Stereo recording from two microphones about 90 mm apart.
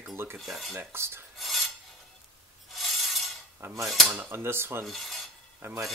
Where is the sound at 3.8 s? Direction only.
Centre (ahead or behind).